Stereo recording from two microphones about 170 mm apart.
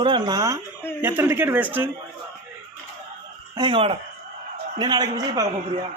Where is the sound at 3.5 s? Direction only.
30° right (ahead or behind).